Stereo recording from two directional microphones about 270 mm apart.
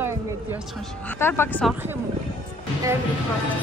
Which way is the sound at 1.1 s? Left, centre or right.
Centre.